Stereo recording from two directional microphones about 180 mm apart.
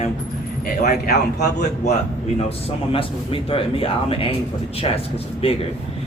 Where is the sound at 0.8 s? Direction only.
60° left (ahead or behind).